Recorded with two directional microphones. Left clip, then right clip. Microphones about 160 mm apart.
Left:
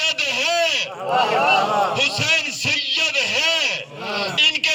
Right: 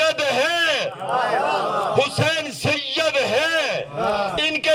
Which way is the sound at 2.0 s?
40° right (ahead or behind).